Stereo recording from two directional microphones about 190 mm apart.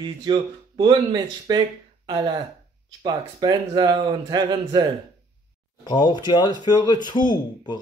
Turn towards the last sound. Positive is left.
turn(degrees=25)  # may be behind; listen again after turning